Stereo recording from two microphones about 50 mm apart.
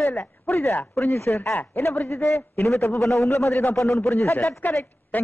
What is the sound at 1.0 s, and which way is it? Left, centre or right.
A man's voice, left.